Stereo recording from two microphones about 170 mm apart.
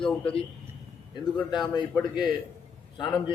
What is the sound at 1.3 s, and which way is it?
Speech, 25° left (ahead or behind).